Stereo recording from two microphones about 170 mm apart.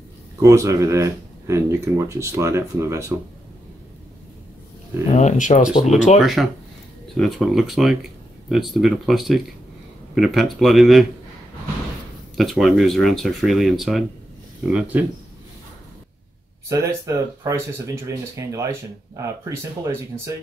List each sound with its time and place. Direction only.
0.4 s speech: 20° right (ahead or behind)
5.1 s speech: 45° left (ahead or behind)
6.1 s speech: centre (ahead or behind)
12.4 s speech: centre (ahead or behind)
16.6 s speech: 20° right (ahead or behind)